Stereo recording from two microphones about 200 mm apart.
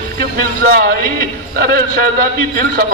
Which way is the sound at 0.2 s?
50° right (ahead or behind).